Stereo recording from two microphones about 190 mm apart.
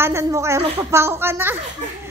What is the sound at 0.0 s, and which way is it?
A woman's voice, 15° right (ahead or behind).